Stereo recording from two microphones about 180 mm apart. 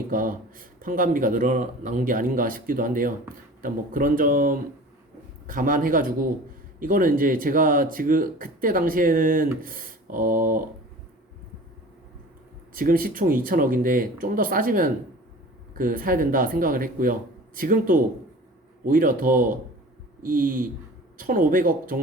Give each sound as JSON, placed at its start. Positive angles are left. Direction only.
{"t": 0.1, "sound": "speech", "side_deg": -50}
{"t": 12.7, "sound": "speech", "side_deg": -50}